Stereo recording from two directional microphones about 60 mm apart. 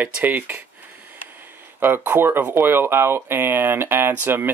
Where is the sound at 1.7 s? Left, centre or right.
Right.